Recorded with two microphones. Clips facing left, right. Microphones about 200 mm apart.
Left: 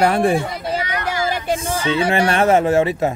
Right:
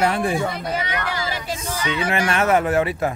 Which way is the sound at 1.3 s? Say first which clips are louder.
Left 7 dB; 55° left (ahead or behind).